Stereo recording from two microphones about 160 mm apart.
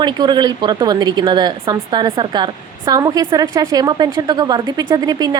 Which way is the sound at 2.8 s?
25° right (ahead or behind).